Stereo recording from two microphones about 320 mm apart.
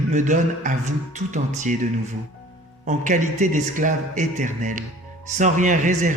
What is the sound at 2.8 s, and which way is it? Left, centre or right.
A man's voice, right.